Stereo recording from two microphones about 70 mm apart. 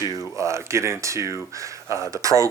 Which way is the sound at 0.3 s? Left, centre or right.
Right.